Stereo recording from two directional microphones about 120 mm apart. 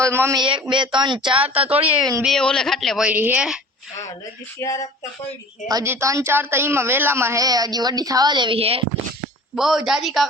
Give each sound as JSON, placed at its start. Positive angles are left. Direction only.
{"t": 0.0, "sound": "a woman's voice", "side_deg": -20}
{"t": 0.3, "sound": "speech", "side_deg": -45}
{"t": 1.4, "sound": "a woman's voice", "side_deg": -10}
{"t": 2.2, "sound": "speech", "side_deg": 5}
{"t": 3.0, "sound": "a woman's voice", "side_deg": -15}
{"t": 4.6, "sound": "a sound", "side_deg": 30}
{"t": 5.6, "sound": "a woman's voice", "side_deg": -30}
{"t": 9.6, "sound": "speech", "side_deg": 0}